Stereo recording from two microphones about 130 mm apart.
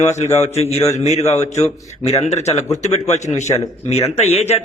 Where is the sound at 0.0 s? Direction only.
60° left (ahead or behind).